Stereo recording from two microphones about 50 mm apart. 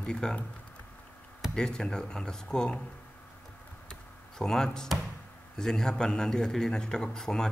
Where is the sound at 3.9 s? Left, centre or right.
Centre.